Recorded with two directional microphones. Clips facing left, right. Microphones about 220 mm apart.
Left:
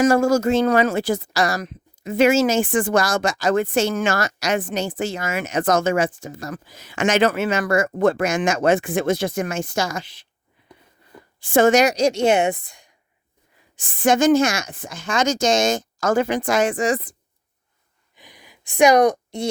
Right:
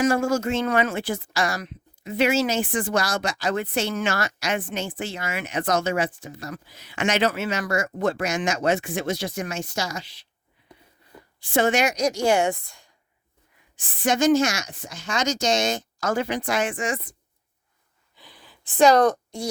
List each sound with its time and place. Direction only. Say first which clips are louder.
0.0 s speech: left 5 dB; 40° left (ahead or behind)
11.3 s a woman's voice: left 6 dB; 45° left (ahead or behind); by 12.9 s 15° left (ahead or behind)
13.7 s speech: left 5 dB; 50° left (ahead or behind)
18.2 s a sound: left 2 dB; 15° left (ahead or behind)